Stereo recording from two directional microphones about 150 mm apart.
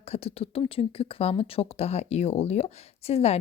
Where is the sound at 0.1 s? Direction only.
40° left (ahead or behind).